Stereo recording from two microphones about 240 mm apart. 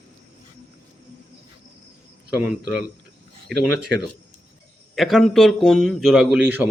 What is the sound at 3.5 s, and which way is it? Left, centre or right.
Speech, right.